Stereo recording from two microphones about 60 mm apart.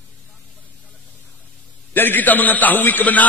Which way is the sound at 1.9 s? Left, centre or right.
Left.